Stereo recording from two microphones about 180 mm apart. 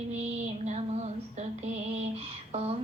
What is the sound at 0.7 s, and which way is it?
Female singing, 40° right (ahead or behind).